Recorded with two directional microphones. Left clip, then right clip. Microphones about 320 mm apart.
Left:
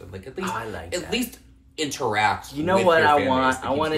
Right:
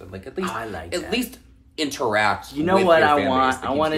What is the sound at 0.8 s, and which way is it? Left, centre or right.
Speech, centre.